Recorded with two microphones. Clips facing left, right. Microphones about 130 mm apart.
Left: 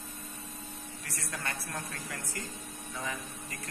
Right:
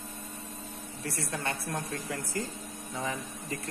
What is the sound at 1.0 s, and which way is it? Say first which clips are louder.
Speech: right 7 dB; 30° right (ahead or behind).